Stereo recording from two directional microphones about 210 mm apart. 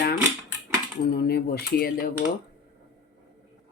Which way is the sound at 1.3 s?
50° left (ahead or behind).